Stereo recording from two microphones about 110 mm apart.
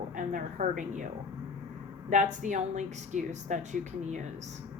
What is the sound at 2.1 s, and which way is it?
Speech, 90° right.